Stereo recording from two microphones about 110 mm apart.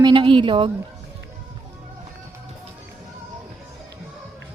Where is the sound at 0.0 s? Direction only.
50° right (ahead or behind).